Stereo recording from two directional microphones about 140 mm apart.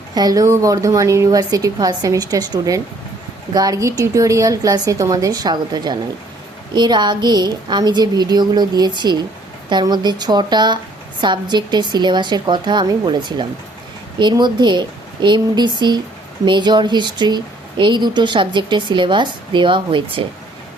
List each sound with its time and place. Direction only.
0.1 s a woman's voice: 30° right (ahead or behind)